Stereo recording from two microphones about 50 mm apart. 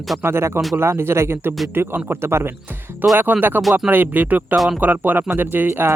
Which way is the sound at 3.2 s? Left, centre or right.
Right.